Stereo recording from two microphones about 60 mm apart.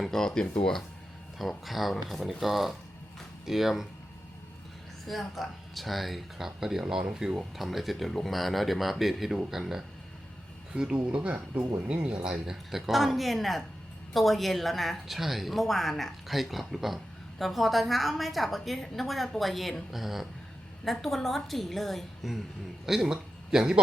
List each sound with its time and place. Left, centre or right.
0.0 s speech: centre
5.0 s speech: centre
22.9 s speech: centre